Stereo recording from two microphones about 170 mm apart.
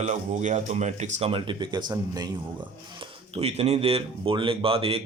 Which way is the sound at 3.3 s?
40° right (ahead or behind).